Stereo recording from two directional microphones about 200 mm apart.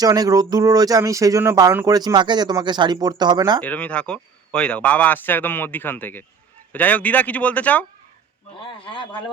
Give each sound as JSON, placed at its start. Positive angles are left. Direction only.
{"t": 0.0, "sound": "speech", "side_deg": -20}
{"t": 3.6, "sound": "speech", "side_deg": 5}
{"t": 8.5, "sound": "a man's voice", "side_deg": 25}